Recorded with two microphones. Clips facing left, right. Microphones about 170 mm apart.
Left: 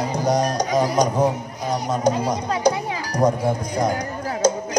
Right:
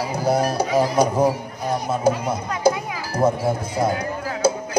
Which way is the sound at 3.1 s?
5° right (ahead or behind).